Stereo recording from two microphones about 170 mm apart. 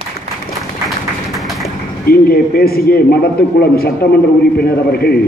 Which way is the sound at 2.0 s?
65° left (ahead or behind).